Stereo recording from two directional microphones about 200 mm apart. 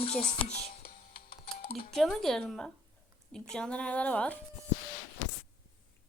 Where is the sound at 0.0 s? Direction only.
30° left (ahead or behind).